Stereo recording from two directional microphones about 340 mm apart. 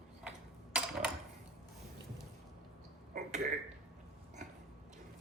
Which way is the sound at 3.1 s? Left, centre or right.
Right.